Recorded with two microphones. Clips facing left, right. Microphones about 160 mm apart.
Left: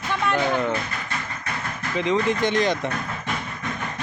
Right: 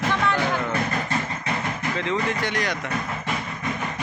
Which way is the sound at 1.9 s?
20° left (ahead or behind).